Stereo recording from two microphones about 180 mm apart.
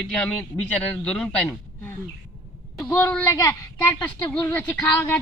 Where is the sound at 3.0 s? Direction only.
10° left (ahead or behind).